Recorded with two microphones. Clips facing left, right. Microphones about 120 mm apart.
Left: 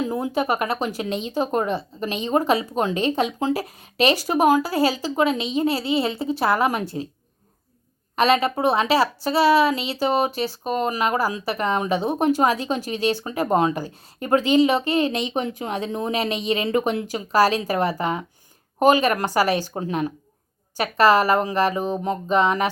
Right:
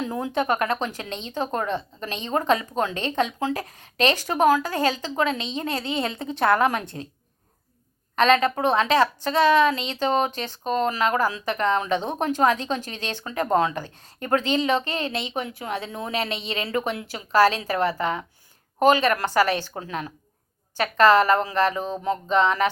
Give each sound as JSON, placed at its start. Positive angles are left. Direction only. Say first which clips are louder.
{"t": 0.0, "sound": "a woman's voice", "louder": "left 2 dB", "side_deg": 10}
{"t": 8.1, "sound": "a woman's voice", "louder": "even", "side_deg": 10}